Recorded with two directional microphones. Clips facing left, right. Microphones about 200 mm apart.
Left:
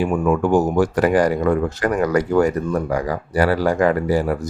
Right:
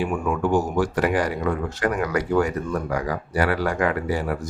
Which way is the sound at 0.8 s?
45° left (ahead or behind).